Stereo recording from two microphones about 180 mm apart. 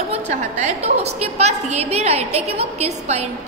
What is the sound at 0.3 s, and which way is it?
A woman's voice, 40° right (ahead or behind).